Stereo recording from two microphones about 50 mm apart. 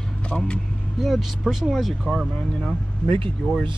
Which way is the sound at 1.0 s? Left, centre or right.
Centre.